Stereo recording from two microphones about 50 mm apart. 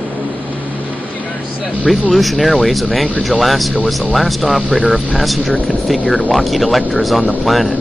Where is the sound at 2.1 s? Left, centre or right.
Centre.